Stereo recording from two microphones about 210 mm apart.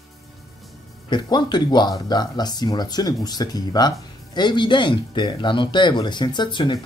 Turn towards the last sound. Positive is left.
turn(degrees=20)  # may be behind; listen again after turning